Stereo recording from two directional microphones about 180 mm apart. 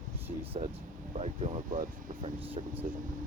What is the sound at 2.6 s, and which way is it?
Speech, 30° right (ahead or behind).